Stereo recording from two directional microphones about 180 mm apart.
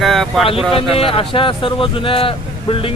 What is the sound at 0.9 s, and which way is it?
Speech, 30° left (ahead or behind).